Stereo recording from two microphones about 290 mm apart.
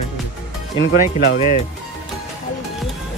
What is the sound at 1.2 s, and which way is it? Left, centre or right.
Speech, left.